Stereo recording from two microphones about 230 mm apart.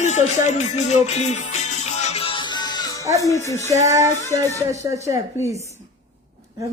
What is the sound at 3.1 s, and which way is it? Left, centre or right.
Speech, centre.